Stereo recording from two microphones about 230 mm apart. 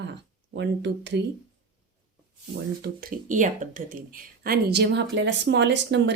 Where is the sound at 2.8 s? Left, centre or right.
Right.